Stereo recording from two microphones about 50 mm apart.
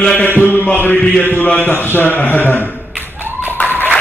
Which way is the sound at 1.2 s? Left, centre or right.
Left.